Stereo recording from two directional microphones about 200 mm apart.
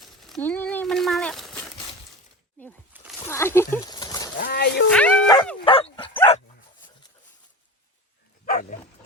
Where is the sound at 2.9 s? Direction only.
10° right (ahead or behind).